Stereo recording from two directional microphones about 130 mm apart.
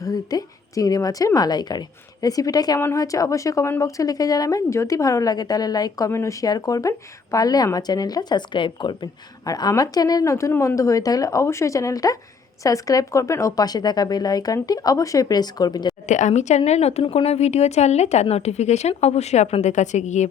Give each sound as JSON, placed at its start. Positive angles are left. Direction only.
{"t": 0.0, "sound": "speech", "side_deg": 30}
{"t": 16.0, "sound": "a woman's voice", "side_deg": 70}